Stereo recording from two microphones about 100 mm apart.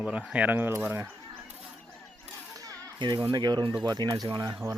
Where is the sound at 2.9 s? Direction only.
50° right (ahead or behind).